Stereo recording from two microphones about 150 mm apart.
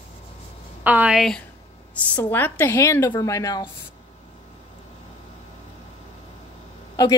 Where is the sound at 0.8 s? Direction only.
10° right (ahead or behind).